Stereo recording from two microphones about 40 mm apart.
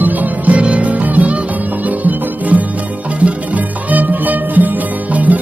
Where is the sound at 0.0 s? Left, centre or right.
Right.